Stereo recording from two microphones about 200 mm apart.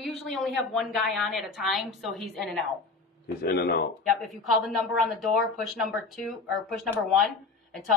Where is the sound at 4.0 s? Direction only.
Centre (ahead or behind).